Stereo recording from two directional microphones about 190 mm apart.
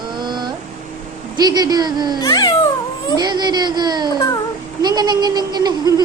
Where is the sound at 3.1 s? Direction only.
20° right (ahead or behind).